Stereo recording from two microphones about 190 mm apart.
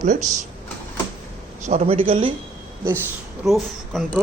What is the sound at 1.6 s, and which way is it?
Speech, 35° right (ahead or behind).